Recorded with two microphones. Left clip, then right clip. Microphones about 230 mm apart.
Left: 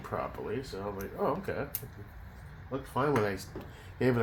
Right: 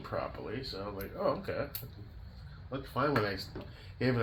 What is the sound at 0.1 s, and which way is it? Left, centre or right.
Speech, left.